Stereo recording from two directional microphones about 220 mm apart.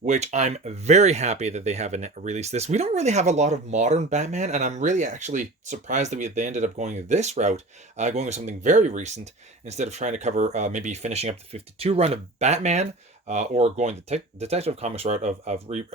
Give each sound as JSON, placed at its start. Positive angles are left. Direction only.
{"t": 0.0, "sound": "speech", "side_deg": -30}